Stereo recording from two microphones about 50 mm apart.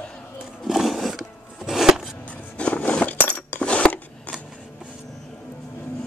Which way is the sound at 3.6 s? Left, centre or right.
Left.